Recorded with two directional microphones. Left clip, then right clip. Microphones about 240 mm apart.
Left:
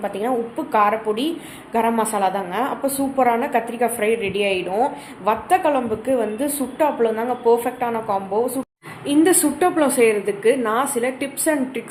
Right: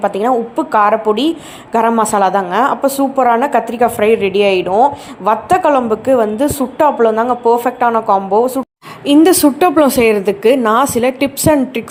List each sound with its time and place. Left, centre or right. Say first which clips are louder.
0.0 s a woman's voice: right 9 dB; right